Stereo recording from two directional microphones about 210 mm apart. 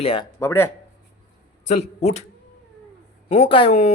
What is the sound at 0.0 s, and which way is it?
Speech, 25° left (ahead or behind).